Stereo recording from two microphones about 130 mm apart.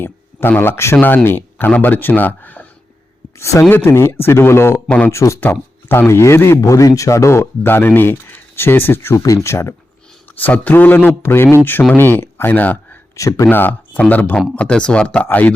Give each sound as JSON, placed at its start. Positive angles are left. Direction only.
{"t": 0.0, "sound": "speech", "side_deg": 15}
{"t": 5.1, "sound": "speech", "side_deg": 20}
{"t": 13.1, "sound": "speech", "side_deg": 25}